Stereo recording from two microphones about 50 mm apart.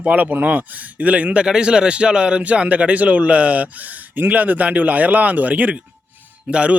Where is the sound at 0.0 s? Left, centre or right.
Right.